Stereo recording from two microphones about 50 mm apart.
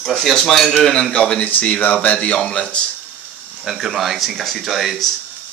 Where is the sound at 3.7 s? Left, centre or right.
Centre.